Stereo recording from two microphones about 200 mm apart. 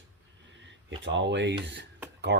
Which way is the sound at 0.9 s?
65° right (ahead or behind).